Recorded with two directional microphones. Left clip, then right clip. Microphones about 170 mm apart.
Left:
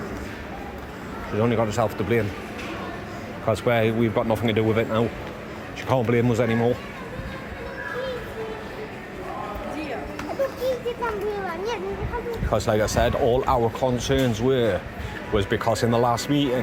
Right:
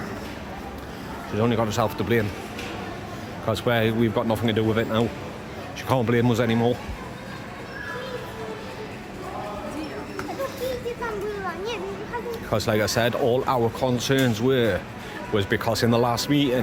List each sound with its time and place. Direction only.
1.4 s speech: 15° right (ahead or behind)
3.4 s speech: 10° right (ahead or behind)
12.5 s speech: 15° right (ahead or behind)